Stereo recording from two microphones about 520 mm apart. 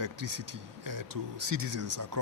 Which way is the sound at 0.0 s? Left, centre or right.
Right.